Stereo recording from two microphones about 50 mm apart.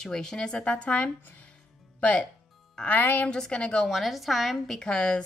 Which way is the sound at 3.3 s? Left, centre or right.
Centre.